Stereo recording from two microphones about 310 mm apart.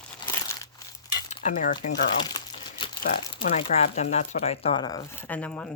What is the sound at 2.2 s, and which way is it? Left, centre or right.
Crumpling, centre.